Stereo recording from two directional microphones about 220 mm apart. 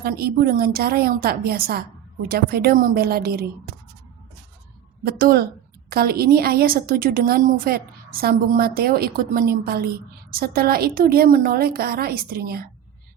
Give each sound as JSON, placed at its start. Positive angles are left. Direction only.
{"t": 0.0, "sound": "a woman's voice", "side_deg": -45}
{"t": 5.0, "sound": "a woman's voice", "side_deg": -40}